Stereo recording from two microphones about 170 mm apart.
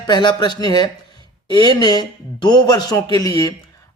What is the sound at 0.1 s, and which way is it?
A man's voice, 25° left (ahead or behind).